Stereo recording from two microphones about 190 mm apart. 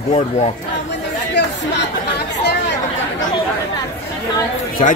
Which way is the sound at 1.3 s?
65° left (ahead or behind).